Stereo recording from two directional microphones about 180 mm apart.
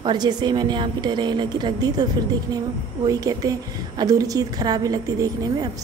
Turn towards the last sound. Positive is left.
turn(degrees=-20)  # may be behind; listen again after turning